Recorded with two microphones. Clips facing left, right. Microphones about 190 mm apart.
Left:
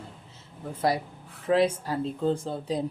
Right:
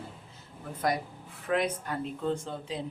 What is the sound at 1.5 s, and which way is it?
Speech, 30° left (ahead or behind).